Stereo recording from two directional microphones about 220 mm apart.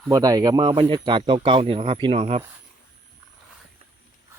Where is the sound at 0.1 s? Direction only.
15° right (ahead or behind).